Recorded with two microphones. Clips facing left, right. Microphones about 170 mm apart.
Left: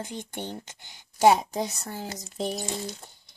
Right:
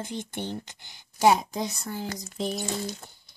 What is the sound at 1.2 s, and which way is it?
Speech, 40° left (ahead or behind).